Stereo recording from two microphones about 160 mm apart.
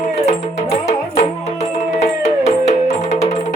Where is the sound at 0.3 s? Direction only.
45° left (ahead or behind).